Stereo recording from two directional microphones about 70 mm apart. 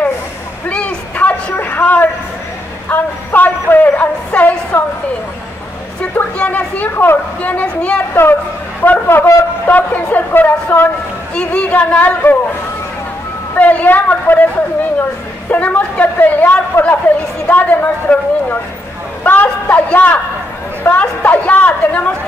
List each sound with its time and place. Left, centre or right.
0.7 s a sound: centre
6.1 s a sound: centre
8.1 s a woman's voice: left
8.8 s a sound: left
10.1 s speech: left
11.3 s a woman's voice: centre
13.6 s a woman's voice: left
15.5 s a woman's voice: left
16.7 s a woman's voice: left
17.5 s a woman's voice: left
19.2 s a sound: left
20.8 s a woman's voice: left